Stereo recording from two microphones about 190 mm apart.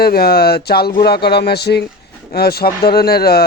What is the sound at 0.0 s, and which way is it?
Speech, 55° left (ahead or behind).